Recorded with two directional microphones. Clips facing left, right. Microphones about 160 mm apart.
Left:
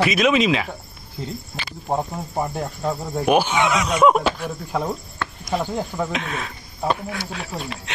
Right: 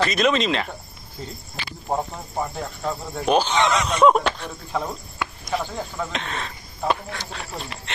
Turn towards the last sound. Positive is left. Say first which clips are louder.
# left 3 dB
turn(degrees=5)  # may be behind; listen again after turning